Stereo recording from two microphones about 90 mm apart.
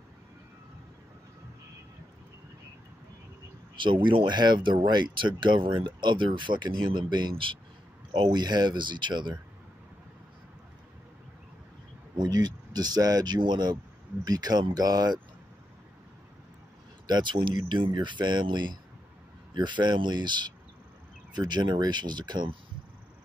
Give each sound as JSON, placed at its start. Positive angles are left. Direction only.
{"t": 3.7, "sound": "speech", "side_deg": -65}
{"t": 12.2, "sound": "speech", "side_deg": -45}
{"t": 17.1, "sound": "speech", "side_deg": -60}